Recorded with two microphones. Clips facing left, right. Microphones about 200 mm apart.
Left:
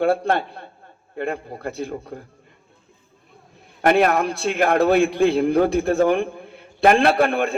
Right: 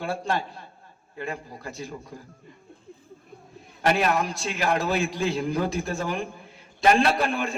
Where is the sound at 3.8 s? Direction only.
55° left (ahead or behind).